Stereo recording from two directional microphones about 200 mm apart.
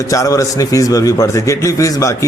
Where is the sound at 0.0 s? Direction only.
15° left (ahead or behind).